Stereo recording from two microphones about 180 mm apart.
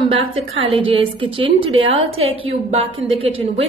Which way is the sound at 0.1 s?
30° right (ahead or behind).